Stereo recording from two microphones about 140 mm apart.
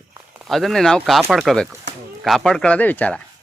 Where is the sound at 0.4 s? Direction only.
Centre (ahead or behind).